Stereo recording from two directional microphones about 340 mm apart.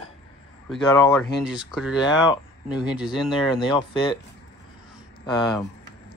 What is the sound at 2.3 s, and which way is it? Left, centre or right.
Speech, centre.